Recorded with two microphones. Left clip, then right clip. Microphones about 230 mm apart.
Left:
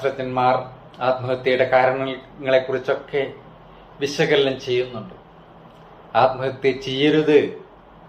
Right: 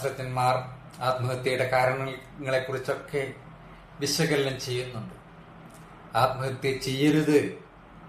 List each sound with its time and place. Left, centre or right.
0.0 s speech: right
6.1 s speech: right